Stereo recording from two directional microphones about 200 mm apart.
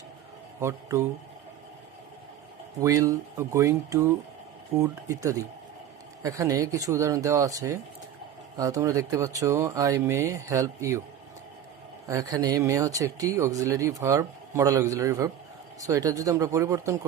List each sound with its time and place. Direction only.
0.6 s speech: 15° right (ahead or behind)
2.8 s speech: 15° right (ahead or behind)
12.0 s speech: 15° right (ahead or behind)